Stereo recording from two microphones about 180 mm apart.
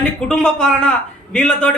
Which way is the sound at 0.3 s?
5° left (ahead or behind).